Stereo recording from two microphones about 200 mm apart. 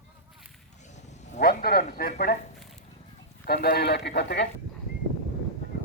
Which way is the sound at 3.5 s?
50° left (ahead or behind).